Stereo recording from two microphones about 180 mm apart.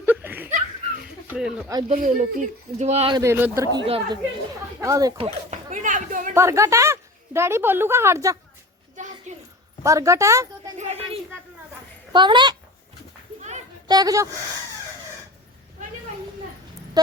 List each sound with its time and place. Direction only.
0.0 s laughter: 10° right (ahead or behind)
1.3 s speech: 5° right (ahead or behind)
1.9 s speech: 45° right (ahead or behind)
3.2 s a woman's voice: 15° right (ahead or behind)
3.8 s speech: 30° right (ahead or behind)
4.8 s speech: 20° right (ahead or behind)
5.1 s speech: 35° right (ahead or behind)
6.3 s a woman's voice: 15° right (ahead or behind)
9.0 s a sound: 45° right (ahead or behind)
9.8 s a woman's voice: 15° right (ahead or behind)
10.8 s speech: 35° right (ahead or behind)
12.1 s speech: 25° right (ahead or behind)
13.8 s speech: 20° right (ahead or behind)